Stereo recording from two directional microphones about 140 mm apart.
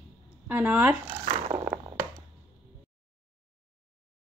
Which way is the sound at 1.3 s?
40° right (ahead or behind).